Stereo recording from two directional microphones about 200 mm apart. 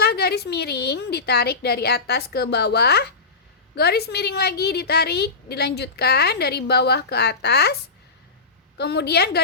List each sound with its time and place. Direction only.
0.0 s a woman's voice: 55° left (ahead or behind)
8.8 s a woman's voice: 55° left (ahead or behind)